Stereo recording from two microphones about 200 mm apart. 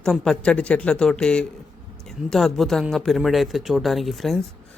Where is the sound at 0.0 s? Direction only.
5° left (ahead or behind).